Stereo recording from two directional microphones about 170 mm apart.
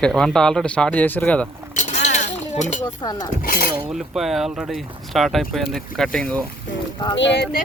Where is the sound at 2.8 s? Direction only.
25° left (ahead or behind).